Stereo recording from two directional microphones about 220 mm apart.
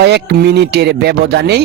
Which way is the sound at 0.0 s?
50° right (ahead or behind).